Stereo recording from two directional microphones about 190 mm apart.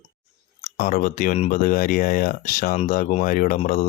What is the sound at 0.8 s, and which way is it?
Speech, 45° left (ahead or behind).